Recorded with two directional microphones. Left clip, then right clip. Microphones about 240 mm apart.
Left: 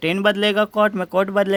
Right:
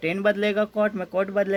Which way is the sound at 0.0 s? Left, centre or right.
Left.